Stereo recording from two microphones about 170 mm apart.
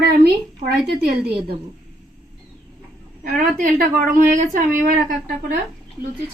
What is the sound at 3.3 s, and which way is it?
Speech, 60° right (ahead or behind).